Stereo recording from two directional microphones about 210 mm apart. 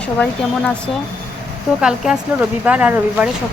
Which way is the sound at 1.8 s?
5° right (ahead or behind).